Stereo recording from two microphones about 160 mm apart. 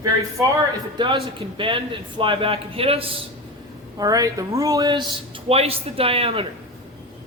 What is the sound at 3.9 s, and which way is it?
A woman's voice, 20° right (ahead or behind).